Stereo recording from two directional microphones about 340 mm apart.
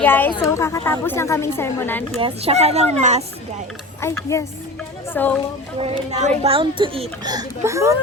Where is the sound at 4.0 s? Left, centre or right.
Centre.